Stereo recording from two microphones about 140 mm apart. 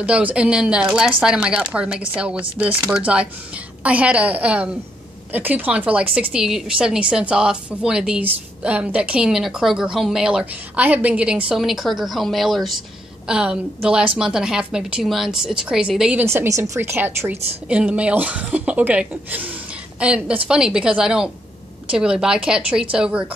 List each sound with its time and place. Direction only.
0.0 s a woman's voice: 10° right (ahead or behind)
16.3 s a woman's voice: 20° right (ahead or behind)